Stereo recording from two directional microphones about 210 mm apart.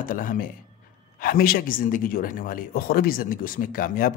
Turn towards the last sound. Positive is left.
turn(degrees=40)  # may be behind; listen again after turning